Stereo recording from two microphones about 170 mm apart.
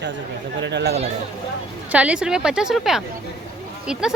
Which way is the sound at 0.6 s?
90° right.